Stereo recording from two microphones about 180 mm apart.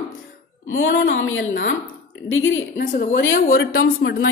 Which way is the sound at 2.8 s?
50° left (ahead or behind).